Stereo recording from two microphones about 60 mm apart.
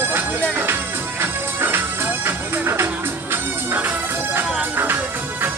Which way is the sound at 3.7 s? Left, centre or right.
Right.